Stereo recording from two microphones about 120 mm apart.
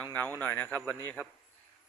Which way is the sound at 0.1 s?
15° left (ahead or behind).